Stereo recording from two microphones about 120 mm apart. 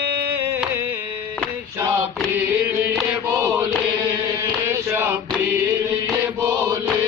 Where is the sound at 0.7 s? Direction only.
20° right (ahead or behind).